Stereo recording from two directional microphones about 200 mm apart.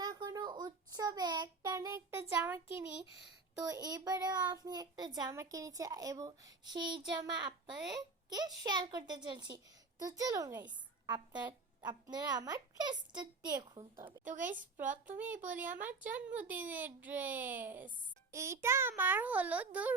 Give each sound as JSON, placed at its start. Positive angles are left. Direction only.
{"t": 0.0, "sound": "a sound", "side_deg": -20}
{"t": 3.6, "sound": "a child's voice", "side_deg": -20}
{"t": 14.3, "sound": "a woman's voice", "side_deg": -40}
{"t": 15.5, "sound": "a child's voice", "side_deg": -10}